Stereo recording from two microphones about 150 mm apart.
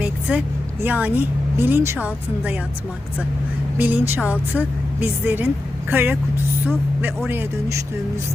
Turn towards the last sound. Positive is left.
turn(degrees=-15)  # may be behind; listen again after turning